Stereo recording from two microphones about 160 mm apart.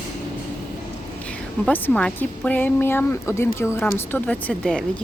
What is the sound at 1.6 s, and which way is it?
Speech, 10° left (ahead or behind).